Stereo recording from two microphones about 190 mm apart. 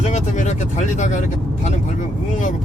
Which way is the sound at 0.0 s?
40° left (ahead or behind).